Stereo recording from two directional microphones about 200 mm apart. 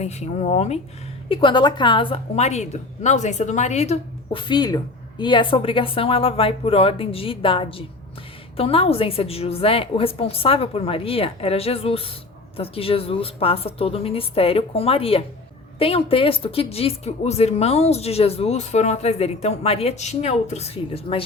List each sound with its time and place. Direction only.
0.0 s a woman's voice: 35° left (ahead or behind)